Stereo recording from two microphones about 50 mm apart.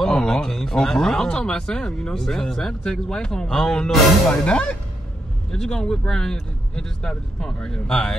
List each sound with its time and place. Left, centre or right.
0.0 s speech: centre